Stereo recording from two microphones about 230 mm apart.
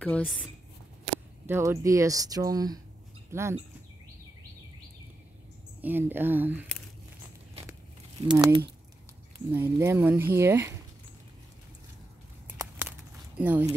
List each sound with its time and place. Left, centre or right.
0.0 s speech: centre
1.4 s speech: centre
5.8 s speech: centre
8.2 s speech: centre
12.5 s a sound: centre
13.4 s speech: centre